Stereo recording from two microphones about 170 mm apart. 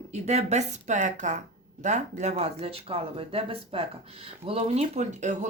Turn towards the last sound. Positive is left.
turn(degrees=-45)  # may be behind; listen again after turning